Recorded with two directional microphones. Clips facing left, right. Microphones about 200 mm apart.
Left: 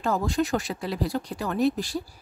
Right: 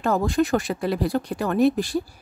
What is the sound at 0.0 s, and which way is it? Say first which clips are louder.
A woman's voice: right 4 dB; 55° right (ahead or behind).